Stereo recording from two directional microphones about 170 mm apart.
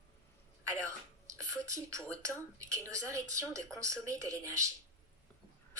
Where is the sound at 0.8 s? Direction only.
20° right (ahead or behind).